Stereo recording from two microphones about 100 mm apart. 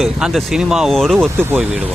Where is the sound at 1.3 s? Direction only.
20° right (ahead or behind).